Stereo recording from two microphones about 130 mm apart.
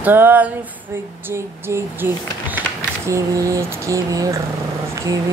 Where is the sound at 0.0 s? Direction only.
15° right (ahead or behind).